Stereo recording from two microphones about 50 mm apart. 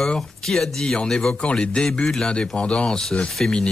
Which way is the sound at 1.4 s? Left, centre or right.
Centre.